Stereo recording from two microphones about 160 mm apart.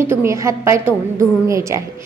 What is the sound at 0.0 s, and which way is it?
A woman's voice, 15° right (ahead or behind).